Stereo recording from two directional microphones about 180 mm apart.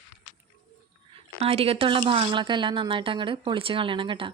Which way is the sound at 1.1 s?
35° right (ahead or behind).